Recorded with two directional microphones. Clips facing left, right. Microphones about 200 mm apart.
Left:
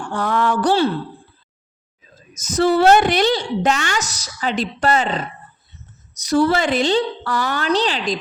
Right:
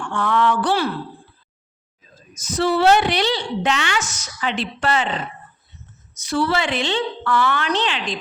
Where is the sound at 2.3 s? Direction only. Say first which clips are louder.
Left 4 dB; 45° left (ahead or behind).